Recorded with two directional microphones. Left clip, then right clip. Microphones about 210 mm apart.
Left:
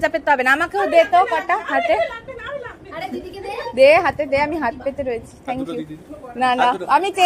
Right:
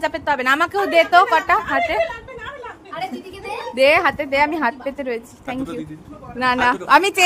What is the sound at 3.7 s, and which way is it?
A woman's voice, 10° right (ahead or behind).